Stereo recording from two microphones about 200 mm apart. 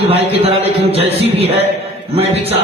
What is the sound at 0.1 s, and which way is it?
A man's voice, 30° right (ahead or behind).